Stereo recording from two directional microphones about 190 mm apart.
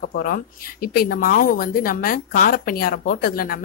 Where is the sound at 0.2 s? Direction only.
50° left (ahead or behind).